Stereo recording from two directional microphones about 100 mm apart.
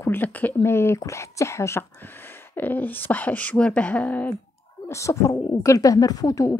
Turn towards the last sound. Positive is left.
turn(degrees=35)  # may be behind; listen again after turning